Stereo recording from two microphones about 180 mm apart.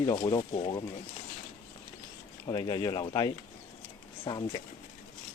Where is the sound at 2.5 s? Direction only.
25° left (ahead or behind).